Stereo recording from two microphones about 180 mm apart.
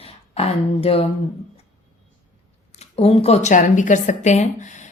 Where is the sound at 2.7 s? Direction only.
35° left (ahead or behind).